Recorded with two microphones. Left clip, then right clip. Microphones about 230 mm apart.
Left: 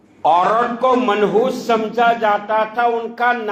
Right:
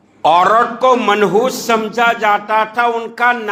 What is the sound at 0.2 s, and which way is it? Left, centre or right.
A man's voice, right.